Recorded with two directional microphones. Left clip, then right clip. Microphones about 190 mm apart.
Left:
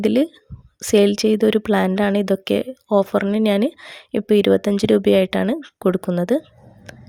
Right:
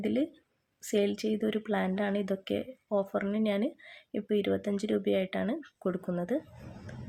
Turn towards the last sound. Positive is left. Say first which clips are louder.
# left 8 dB
turn(degrees=50)  # may be behind; listen again after turning